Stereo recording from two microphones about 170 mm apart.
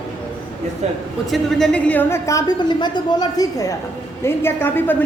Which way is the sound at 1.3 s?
Centre (ahead or behind).